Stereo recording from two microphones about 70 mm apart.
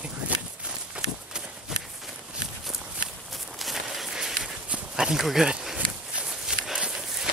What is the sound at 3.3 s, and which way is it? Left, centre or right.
Walk, centre.